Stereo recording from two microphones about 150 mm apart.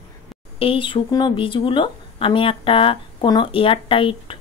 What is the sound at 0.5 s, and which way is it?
Speech, 35° left (ahead or behind).